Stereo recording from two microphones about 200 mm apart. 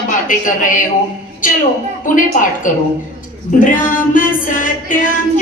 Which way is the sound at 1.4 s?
40° left (ahead or behind).